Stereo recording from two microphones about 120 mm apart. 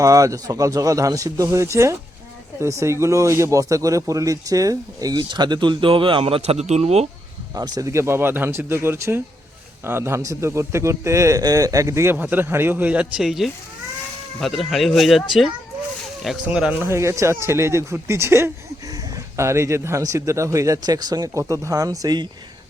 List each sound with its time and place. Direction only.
0.0 s speech: 25° right (ahead or behind); by 7.1 s 60° right (ahead or behind)
7.5 s speech: 30° right (ahead or behind); by 16.9 s 10° right (ahead or behind)
16.9 s speech: 25° right (ahead or behind)